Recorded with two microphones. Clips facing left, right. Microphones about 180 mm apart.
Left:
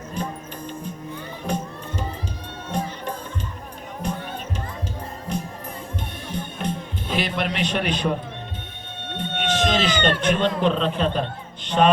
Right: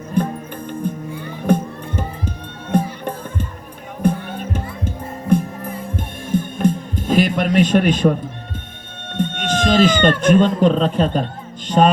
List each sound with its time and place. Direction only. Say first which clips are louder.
0.2 s music: right 10 dB; 55° right (ahead or behind)
1.5 s speech: right 10 dB; 55° right (ahead or behind)
3.0 s music: right 5 dB; 55° right (ahead or behind)
9.1 s speech: right 4 dB; 45° right (ahead or behind)
11.7 s mantra: right 4 dB; 40° right (ahead or behind)